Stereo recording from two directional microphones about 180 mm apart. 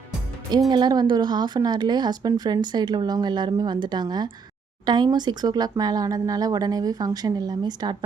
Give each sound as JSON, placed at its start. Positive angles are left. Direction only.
{"t": 0.7, "sound": "speech", "side_deg": -25}